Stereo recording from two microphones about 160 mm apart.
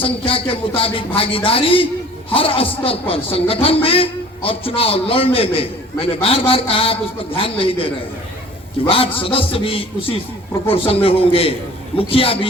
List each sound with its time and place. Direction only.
0.0 s a man's voice: 35° left (ahead or behind)